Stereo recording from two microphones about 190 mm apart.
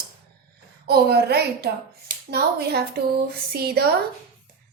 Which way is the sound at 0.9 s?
55° right (ahead or behind).